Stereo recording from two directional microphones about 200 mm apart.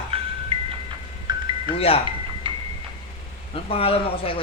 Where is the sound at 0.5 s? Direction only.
25° right (ahead or behind).